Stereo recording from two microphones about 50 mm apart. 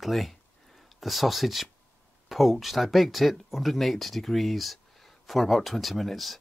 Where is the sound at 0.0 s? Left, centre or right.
Centre.